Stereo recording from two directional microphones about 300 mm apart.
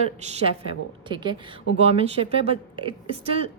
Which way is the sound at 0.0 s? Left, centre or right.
Centre.